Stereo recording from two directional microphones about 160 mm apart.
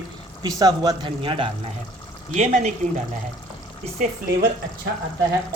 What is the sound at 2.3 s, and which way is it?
Speech, 45° right (ahead or behind).